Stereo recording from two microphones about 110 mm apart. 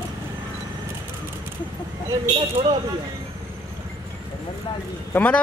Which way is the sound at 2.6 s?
60° right (ahead or behind).